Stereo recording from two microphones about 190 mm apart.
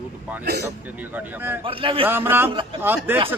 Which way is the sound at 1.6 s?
30° right (ahead or behind).